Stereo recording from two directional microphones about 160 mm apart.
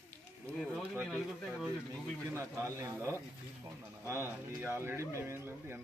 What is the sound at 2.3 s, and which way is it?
Speech, 20° right (ahead or behind).